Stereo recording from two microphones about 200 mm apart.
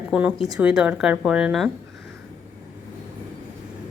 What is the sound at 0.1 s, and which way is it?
A woman's voice, 5° right (ahead or behind).